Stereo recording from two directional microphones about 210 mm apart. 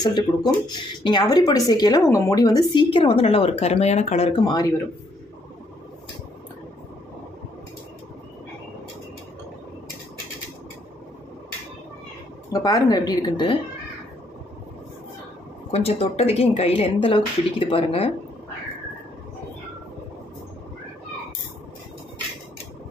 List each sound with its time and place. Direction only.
0.0 s speech: 20° left (ahead or behind)
12.5 s speech: 15° left (ahead or behind)
15.7 s speech: 30° left (ahead or behind)